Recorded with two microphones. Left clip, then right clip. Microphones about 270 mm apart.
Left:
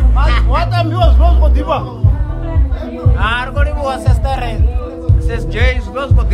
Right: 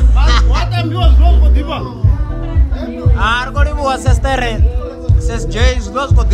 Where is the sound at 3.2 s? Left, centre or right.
Centre.